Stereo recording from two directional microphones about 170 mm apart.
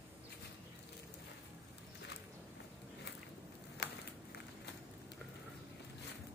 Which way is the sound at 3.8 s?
90° left.